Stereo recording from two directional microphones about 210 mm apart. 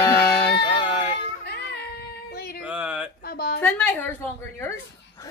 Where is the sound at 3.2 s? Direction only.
50° left (ahead or behind).